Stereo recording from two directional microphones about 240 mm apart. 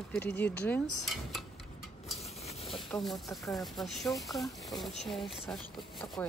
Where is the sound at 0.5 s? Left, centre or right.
Centre.